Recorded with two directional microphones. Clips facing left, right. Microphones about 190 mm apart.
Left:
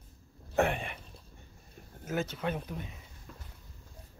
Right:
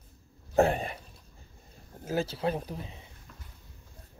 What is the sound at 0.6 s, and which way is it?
Speech, 35° right (ahead or behind).